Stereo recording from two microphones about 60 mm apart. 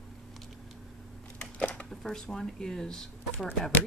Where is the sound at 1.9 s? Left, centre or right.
Centre.